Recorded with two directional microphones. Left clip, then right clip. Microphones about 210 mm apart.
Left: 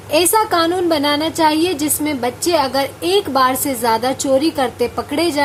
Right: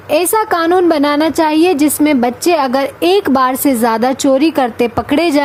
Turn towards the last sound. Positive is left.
turn(degrees=-40)  # may be behind; listen again after turning